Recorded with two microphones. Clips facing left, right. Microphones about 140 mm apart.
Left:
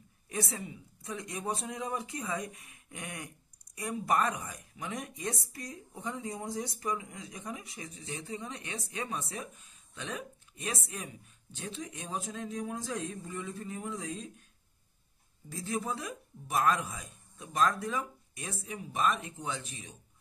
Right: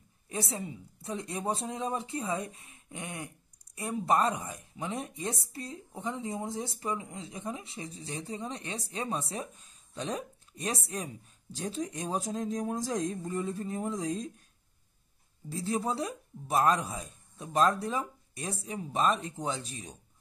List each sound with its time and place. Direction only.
0.3 s speech: 30° right (ahead or behind)
15.5 s speech: 30° right (ahead or behind)